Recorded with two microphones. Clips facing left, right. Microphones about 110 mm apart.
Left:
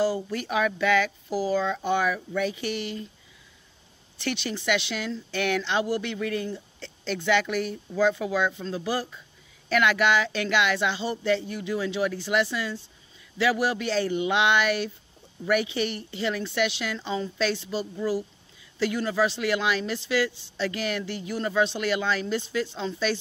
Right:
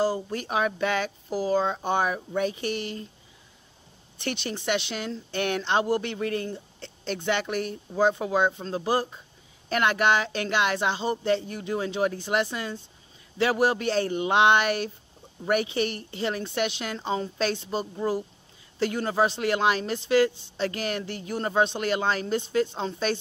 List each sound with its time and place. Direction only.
0.0 s speech: 40° right (ahead or behind)
4.4 s speech: 40° right (ahead or behind)
8.0 s speech: 35° right (ahead or behind)